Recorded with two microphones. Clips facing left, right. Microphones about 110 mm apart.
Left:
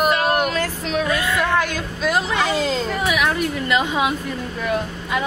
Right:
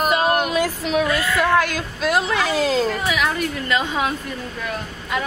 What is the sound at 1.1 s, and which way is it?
Speech, 20° left (ahead or behind).